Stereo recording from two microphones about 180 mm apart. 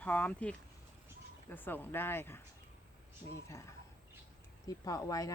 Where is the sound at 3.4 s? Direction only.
15° left (ahead or behind).